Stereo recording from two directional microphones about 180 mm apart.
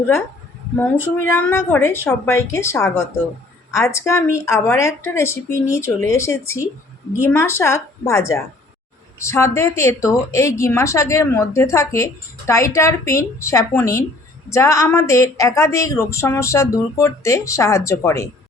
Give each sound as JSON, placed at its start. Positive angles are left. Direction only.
{"t": 1.3, "sound": "a woman's voice", "side_deg": 10}